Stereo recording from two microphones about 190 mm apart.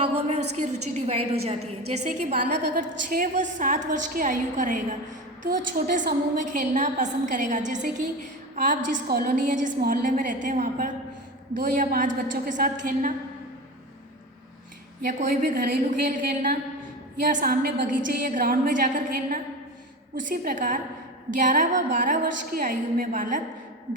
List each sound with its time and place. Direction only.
0.0 s a woman's voice: 35° right (ahead or behind)
2.0 s a woman's voice: 45° right (ahead or behind)
15.0 s a woman's voice: 45° right (ahead or behind)